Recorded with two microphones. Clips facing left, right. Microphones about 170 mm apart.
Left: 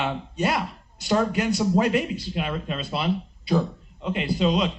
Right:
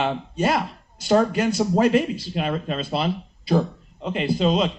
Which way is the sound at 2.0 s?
40° right (ahead or behind).